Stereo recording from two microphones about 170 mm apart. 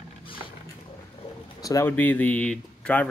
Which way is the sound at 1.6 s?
20° left (ahead or behind).